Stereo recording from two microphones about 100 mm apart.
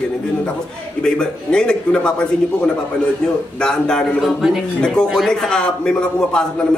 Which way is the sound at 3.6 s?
5° left (ahead or behind).